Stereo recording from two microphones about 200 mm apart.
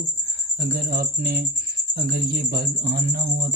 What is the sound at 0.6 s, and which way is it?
Speech, 50° right (ahead or behind).